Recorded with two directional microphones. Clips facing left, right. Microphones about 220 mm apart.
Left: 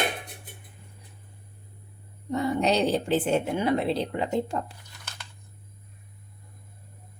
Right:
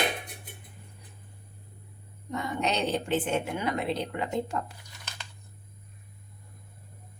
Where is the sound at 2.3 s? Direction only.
35° left (ahead or behind).